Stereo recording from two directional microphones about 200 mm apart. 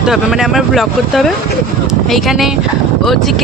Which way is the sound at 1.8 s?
Centre (ahead or behind).